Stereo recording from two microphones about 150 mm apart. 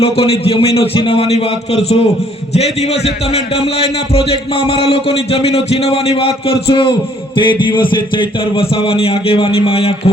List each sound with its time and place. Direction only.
0.0 s a man's voice: 40° left (ahead or behind)